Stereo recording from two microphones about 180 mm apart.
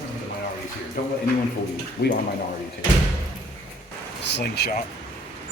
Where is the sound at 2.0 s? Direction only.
55° left (ahead or behind).